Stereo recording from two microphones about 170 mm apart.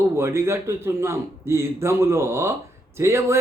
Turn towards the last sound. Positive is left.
turn(degrees=-15)  # may be behind; listen again after turning